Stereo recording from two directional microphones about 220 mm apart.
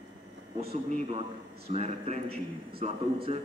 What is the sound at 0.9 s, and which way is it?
A man's voice, 30° right (ahead or behind).